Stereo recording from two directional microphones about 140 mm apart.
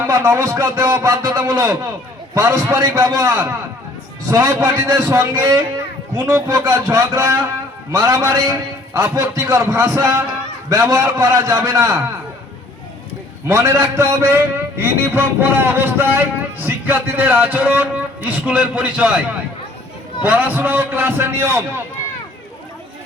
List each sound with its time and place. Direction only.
0.0 s a man's voice: 20° right (ahead or behind)
13.5 s a man's voice: 20° right (ahead or behind)